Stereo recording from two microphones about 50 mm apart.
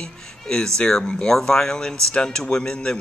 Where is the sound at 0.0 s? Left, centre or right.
Centre.